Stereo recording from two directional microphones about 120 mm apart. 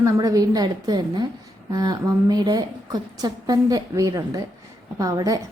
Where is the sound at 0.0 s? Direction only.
30° right (ahead or behind).